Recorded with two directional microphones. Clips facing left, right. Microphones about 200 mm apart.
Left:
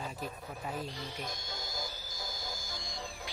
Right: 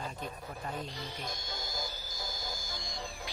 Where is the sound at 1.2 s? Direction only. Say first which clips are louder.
Right 1 dB; 40° right (ahead or behind).